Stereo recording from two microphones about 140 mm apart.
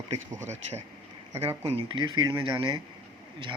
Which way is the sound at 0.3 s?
55° right (ahead or behind).